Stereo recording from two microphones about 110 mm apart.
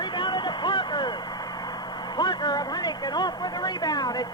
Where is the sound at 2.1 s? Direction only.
40° left (ahead or behind).